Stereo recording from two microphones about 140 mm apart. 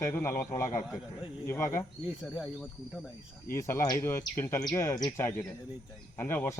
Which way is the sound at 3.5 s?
20° left (ahead or behind).